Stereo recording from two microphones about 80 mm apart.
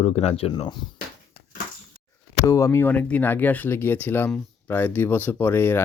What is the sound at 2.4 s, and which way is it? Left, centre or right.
Speech, left.